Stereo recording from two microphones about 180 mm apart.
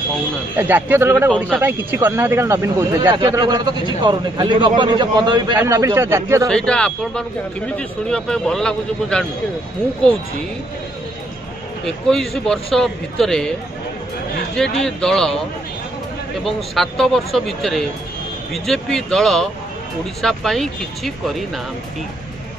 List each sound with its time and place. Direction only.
0.6 s speech: 10° right (ahead or behind)
6.5 s speech: 5° left (ahead or behind)
11.8 s speech: 5° left (ahead or behind)
14.5 s speech: 5° left (ahead or behind)
16.4 s speech: centre (ahead or behind)